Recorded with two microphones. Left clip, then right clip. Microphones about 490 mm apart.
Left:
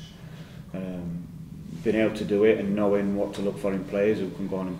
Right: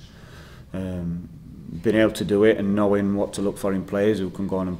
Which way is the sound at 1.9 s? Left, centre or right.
Right.